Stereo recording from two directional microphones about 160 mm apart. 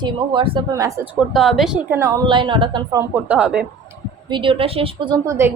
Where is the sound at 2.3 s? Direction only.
30° right (ahead or behind).